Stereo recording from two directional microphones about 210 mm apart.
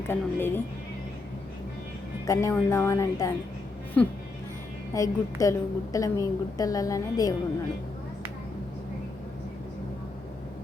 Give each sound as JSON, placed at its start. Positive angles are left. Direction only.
{"t": 0.1, "sound": "a woman's voice", "side_deg": 10}
{"t": 2.2, "sound": "a woman's voice", "side_deg": 15}
{"t": 4.9, "sound": "a woman's voice", "side_deg": 15}